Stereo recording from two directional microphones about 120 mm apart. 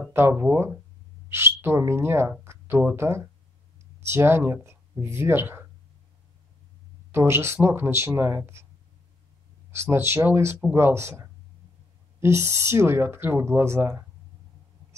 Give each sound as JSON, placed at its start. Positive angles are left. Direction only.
{"t": 0.1, "sound": "speech", "side_deg": -20}
{"t": 7.1, "sound": "speech", "side_deg": -20}
{"t": 9.7, "sound": "speech", "side_deg": -20}